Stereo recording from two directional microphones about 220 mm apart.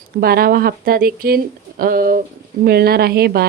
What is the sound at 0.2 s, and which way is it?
A woman's voice, 45° right (ahead or behind).